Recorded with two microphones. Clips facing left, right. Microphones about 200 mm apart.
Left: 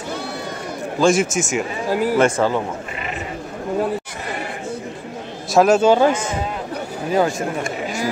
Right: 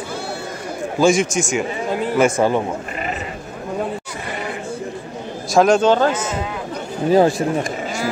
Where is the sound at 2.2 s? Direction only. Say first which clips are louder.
Right 4 dB; 15° right (ahead or behind).